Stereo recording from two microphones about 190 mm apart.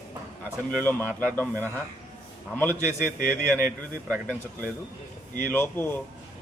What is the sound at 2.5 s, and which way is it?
Speech, 10° left (ahead or behind).